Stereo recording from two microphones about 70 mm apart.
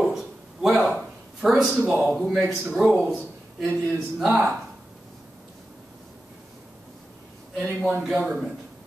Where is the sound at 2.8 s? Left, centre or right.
Centre.